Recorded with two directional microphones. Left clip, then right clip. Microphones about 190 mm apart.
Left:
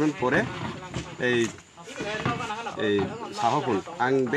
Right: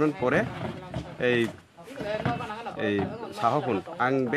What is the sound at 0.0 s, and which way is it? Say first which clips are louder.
A man's voice: even; 25° right (ahead or behind).